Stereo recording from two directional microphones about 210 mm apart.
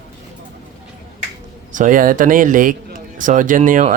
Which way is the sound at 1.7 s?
40° right (ahead or behind).